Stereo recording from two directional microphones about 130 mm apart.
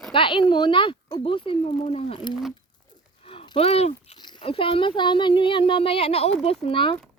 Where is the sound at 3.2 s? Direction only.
40° left (ahead or behind).